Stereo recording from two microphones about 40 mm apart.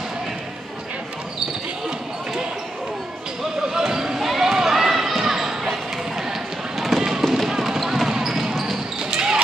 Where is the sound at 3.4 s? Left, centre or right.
Centre.